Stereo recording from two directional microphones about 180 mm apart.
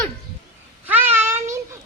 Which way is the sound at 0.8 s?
10° right (ahead or behind).